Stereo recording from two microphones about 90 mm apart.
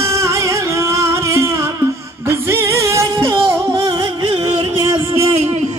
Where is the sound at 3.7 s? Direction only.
60° right (ahead or behind).